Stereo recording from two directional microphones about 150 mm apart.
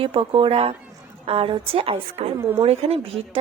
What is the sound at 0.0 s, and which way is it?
Speech, 35° right (ahead or behind).